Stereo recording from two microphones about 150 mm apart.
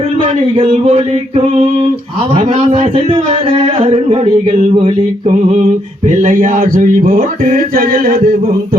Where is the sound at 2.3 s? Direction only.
45° right (ahead or behind).